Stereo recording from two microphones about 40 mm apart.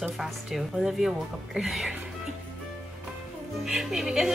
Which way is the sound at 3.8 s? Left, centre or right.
Centre.